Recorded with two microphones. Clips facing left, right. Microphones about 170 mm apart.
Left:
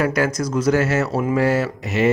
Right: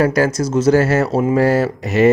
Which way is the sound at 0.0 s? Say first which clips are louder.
Right 4 dB; 35° right (ahead or behind).